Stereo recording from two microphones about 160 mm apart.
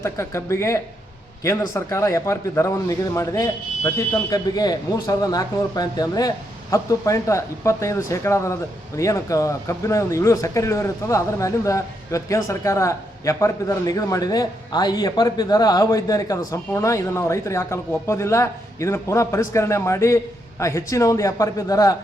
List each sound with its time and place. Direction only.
0.0 s speech: 15° left (ahead or behind)